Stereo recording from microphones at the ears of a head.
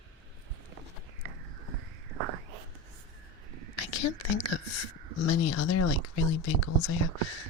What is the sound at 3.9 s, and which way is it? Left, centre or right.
Speech, left.